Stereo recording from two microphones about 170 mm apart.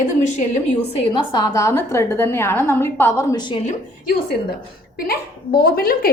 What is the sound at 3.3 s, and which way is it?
Speech, 25° left (ahead or behind).